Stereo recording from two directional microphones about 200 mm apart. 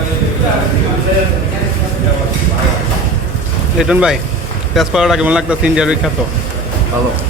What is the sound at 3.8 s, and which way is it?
A man's voice, 5° right (ahead or behind).